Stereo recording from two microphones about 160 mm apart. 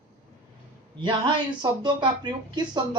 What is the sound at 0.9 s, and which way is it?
Speech, 30° right (ahead or behind).